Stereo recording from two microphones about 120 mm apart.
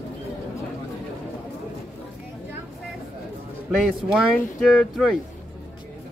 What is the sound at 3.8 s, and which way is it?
Speech, centre (ahead or behind).